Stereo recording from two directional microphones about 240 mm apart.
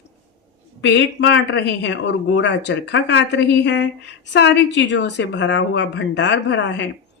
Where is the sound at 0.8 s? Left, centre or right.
Left.